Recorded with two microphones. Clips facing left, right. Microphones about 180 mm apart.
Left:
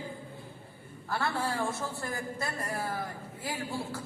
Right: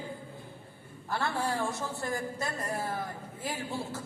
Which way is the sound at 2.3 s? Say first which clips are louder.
Right 1 dB; 20° right (ahead or behind).